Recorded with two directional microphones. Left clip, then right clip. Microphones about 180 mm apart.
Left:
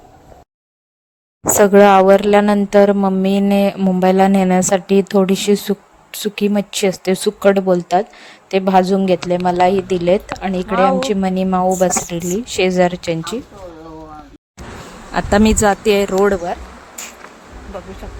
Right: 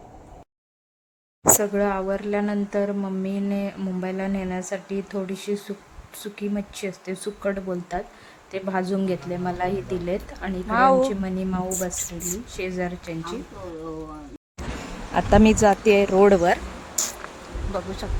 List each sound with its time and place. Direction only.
1.5 s a woman's voice: 60° left (ahead or behind); by 10.5 s 40° left (ahead or behind)
10.7 s a woman's voice: 5° right (ahead or behind)
11.0 s a woman's voice: 40° left (ahead or behind)
12.0 s a woman's voice: centre (ahead or behind)
12.5 s speech: 45° left (ahead or behind)
15.1 s speech: 15° left (ahead or behind)